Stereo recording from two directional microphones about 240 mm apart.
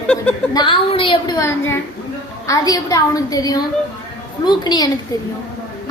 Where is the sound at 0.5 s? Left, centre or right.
Left.